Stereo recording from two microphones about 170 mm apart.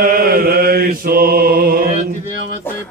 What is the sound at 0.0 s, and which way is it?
Mantra, 60° right (ahead or behind).